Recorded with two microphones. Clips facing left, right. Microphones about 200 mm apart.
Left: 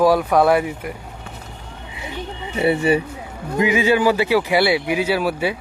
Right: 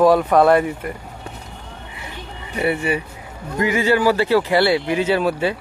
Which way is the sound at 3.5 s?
15° left (ahead or behind).